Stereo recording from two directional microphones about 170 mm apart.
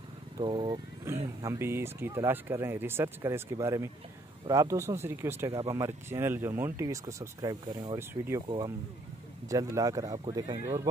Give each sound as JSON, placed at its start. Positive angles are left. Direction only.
{"t": 0.4, "sound": "speech", "side_deg": -25}
{"t": 1.1, "sound": "speech", "side_deg": -15}